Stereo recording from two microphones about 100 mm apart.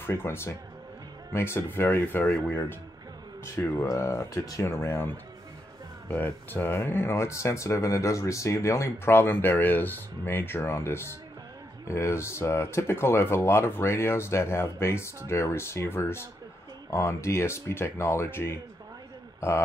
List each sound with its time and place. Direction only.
0.0 s speech: 25° left (ahead or behind)